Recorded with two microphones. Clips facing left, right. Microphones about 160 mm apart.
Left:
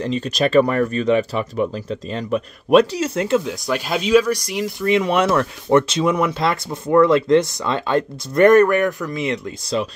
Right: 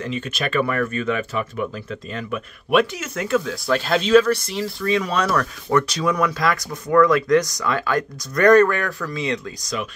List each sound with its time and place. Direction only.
0.0 s speech: 35° left (ahead or behind); by 9.4 s 20° left (ahead or behind)